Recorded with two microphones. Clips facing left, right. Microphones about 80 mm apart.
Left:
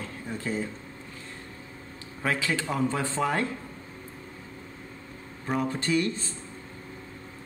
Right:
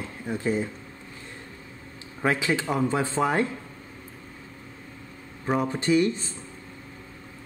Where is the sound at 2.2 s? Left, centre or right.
Right.